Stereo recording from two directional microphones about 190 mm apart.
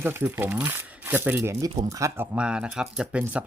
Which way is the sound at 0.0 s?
10° right (ahead or behind).